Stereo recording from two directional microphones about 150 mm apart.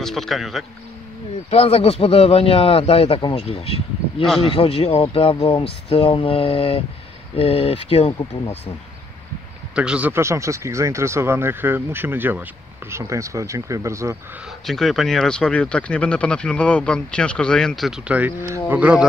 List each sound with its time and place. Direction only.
0.0 s speech: centre (ahead or behind)
1.5 s a man's voice: 40° left (ahead or behind)
9.8 s speech: 10° right (ahead or behind)
14.7 s speech: centre (ahead or behind)